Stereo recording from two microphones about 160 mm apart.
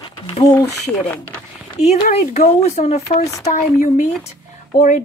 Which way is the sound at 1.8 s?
45° left (ahead or behind).